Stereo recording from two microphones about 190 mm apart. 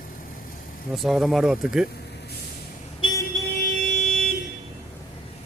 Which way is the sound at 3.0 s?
25° left (ahead or behind).